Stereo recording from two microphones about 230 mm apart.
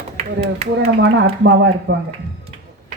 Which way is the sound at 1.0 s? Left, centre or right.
Right.